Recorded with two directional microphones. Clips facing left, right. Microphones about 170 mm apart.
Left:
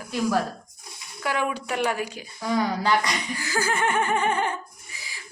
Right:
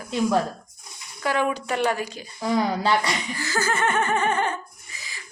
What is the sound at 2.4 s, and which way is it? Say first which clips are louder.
Speech: right 2 dB; 25° right (ahead or behind).